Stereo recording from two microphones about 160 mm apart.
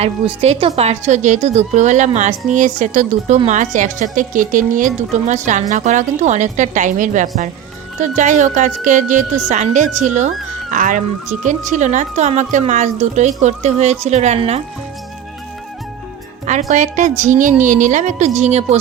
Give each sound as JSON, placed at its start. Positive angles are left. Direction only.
{"t": 0.4, "sound": "a woman's voice", "side_deg": -40}
{"t": 16.5, "sound": "a woman's voice", "side_deg": -45}